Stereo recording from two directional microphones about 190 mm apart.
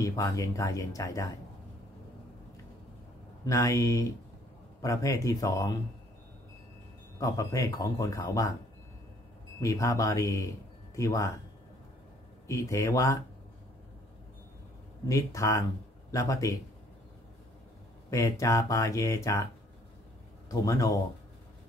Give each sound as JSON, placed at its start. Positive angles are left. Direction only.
{"t": 0.0, "sound": "speech", "side_deg": 15}
{"t": 3.4, "sound": "speech", "side_deg": 15}
{"t": 7.2, "sound": "speech", "side_deg": 15}
{"t": 9.6, "sound": "speech", "side_deg": 15}
{"t": 12.4, "sound": "speech", "side_deg": 15}
{"t": 15.0, "sound": "speech", "side_deg": 15}
{"t": 18.1, "sound": "a man's voice", "side_deg": 15}